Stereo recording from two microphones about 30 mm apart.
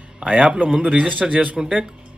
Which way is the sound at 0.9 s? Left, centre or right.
Right.